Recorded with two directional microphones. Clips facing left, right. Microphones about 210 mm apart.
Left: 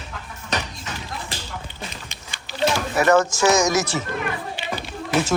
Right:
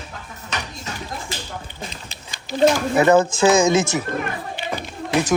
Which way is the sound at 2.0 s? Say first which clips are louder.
Right 5 dB; 40° right (ahead or behind).